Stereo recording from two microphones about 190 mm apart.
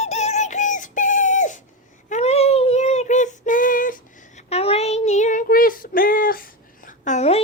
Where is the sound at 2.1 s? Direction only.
35° left (ahead or behind).